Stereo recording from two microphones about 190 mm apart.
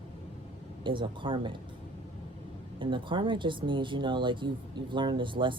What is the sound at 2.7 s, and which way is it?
Speech, 25° right (ahead or behind).